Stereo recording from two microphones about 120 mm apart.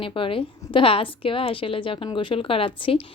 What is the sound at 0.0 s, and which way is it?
A woman's voice, 45° left (ahead or behind).